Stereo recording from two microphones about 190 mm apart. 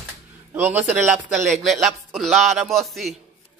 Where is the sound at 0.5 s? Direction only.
10° right (ahead or behind).